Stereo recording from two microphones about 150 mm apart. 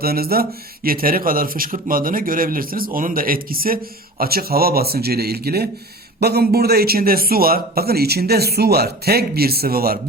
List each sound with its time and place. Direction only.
0.0 s a man's voice: 90° right; by 3.8 s 75° right (ahead or behind)
4.2 s a man's voice: 90° right